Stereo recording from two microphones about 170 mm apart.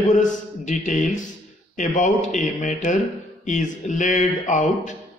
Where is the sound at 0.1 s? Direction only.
45° left (ahead or behind).